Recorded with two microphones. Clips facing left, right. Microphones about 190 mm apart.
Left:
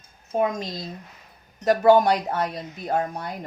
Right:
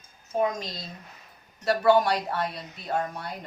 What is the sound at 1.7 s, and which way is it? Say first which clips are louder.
Speech: left 4 dB; 45° left (ahead or behind).